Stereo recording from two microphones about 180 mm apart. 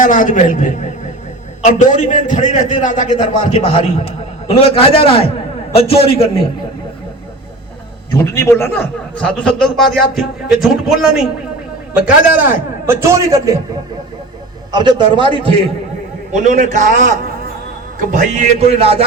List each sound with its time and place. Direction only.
0.0 s a man's voice: 45° left (ahead or behind)
8.2 s a man's voice: 15° left (ahead or behind); by 13.6 s 20° right (ahead or behind)
14.7 s a man's voice: 25° right (ahead or behind)
16.3 s speech: 40° right (ahead or behind)